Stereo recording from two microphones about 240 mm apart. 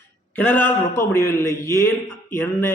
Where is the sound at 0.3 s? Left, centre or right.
Centre.